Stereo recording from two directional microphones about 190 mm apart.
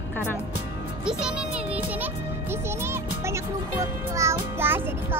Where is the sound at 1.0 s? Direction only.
5° right (ahead or behind).